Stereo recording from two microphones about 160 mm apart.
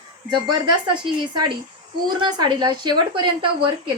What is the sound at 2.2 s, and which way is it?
A woman's voice, 25° right (ahead or behind).